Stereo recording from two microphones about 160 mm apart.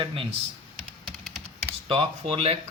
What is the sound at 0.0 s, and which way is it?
Speech, 35° right (ahead or behind).